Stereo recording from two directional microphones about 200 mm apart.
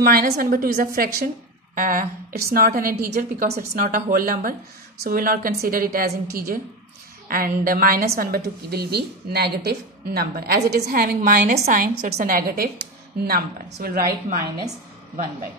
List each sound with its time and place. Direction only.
0.0 s a woman's voice: 45° right (ahead or behind)